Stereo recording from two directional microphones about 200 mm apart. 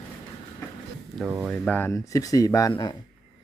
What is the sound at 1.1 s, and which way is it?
Speech, 5° right (ahead or behind).